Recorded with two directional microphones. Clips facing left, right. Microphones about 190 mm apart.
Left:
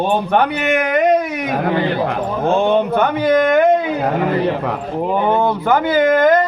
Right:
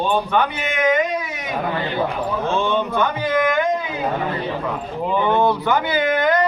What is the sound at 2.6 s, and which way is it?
Speech, 60° left (ahead or behind).